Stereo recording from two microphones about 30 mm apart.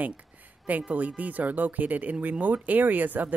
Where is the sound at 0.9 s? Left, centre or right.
Right.